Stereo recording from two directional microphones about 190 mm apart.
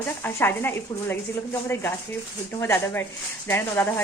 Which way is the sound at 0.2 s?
10° left (ahead or behind).